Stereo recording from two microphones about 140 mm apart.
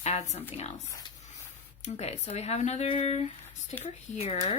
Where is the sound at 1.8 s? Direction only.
50° left (ahead or behind).